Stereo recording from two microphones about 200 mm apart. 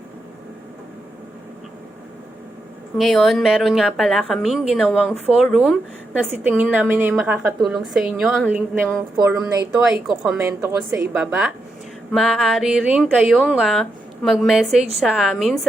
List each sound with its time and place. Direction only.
3.0 s a woman's voice: centre (ahead or behind)